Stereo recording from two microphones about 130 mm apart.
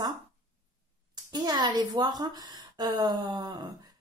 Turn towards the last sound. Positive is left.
turn(degrees=-35)  # may be behind; listen again after turning